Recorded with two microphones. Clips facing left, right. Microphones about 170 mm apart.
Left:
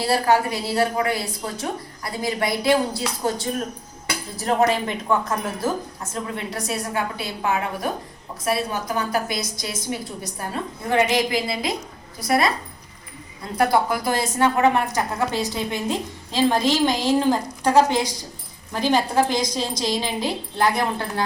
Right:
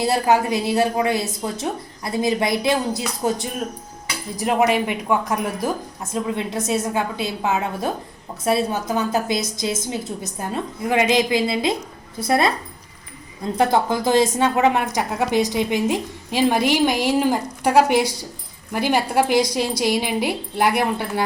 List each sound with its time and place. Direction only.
0.0 s a woman's voice: 20° right (ahead or behind)
4.4 s a woman's voice: 15° right (ahead or behind)